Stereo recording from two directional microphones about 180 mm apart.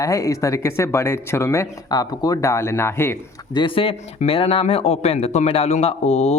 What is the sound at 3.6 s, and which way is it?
Speech, 30° left (ahead or behind).